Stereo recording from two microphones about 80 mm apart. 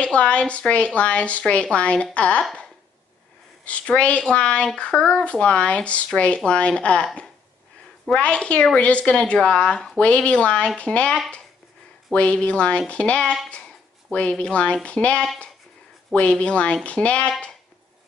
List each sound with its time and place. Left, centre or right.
0.0 s speech: centre
3.6 s speech: centre
8.1 s speech: centre